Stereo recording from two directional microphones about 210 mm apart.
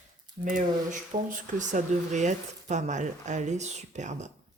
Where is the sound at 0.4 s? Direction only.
35° right (ahead or behind).